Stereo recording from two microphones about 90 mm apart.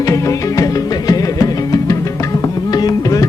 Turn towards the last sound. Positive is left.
turn(degrees=40)  # may be behind; listen again after turning